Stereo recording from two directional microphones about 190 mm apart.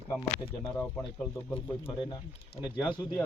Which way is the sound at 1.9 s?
25° left (ahead or behind).